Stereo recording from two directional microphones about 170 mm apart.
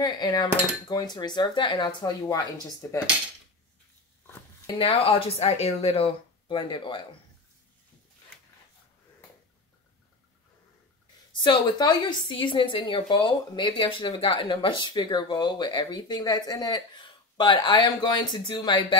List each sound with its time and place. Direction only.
0.0 s a woman's voice: 25° left (ahead or behind)
4.6 s speech: 35° left (ahead or behind)
11.4 s a woman's voice: 25° left (ahead or behind)